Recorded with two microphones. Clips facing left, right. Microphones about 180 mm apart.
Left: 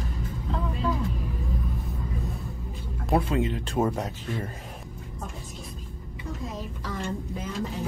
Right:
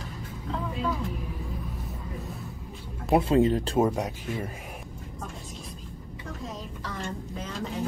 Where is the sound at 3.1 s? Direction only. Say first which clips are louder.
Right 4 dB; 30° right (ahead or behind).